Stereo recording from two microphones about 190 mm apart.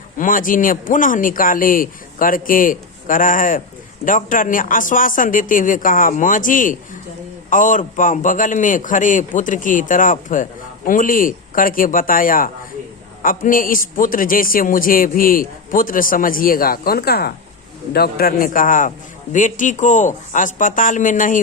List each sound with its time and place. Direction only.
0.2 s a man's voice: 45° left (ahead or behind)